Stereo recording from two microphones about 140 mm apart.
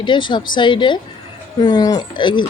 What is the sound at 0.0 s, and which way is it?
A woman's voice, 35° left (ahead or behind).